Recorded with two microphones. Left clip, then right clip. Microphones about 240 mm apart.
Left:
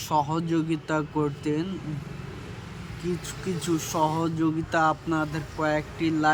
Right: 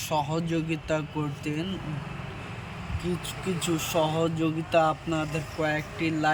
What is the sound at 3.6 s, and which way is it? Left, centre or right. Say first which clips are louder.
Speech: left 1 dB; centre.